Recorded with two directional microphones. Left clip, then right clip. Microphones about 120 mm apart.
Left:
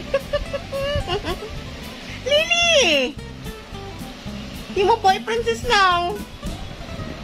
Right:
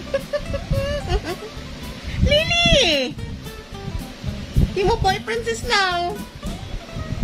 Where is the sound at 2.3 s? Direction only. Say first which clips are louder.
Even; 25° right (ahead or behind).